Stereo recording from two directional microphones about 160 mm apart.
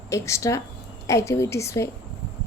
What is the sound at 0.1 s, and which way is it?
A woman's voice, 20° left (ahead or behind).